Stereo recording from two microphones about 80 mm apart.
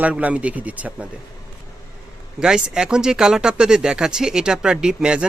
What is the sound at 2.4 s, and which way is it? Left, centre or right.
Speech, centre.